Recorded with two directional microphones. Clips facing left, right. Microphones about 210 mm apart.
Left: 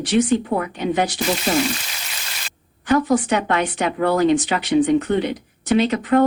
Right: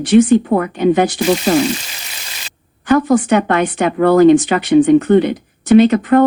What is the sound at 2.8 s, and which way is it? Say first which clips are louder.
Speech: right 5 dB; 55° right (ahead or behind).